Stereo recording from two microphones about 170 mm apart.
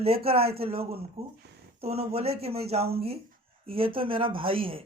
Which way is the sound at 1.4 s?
75° right (ahead or behind).